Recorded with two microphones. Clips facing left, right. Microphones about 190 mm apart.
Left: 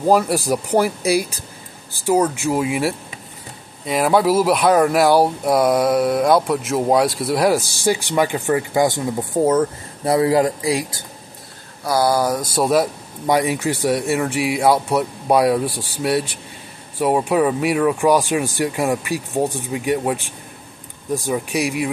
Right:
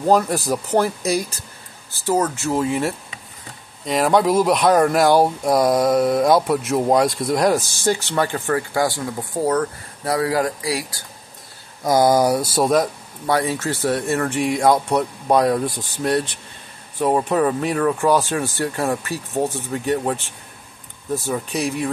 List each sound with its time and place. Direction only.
0.0 s speech: 10° left (ahead or behind)
11.8 s speech: 20° right (ahead or behind)
12.5 s speech: 5° left (ahead or behind)
13.3 s speech: 15° left (ahead or behind)